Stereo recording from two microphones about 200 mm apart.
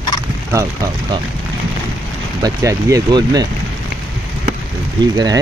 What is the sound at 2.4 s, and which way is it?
Speech, 20° right (ahead or behind).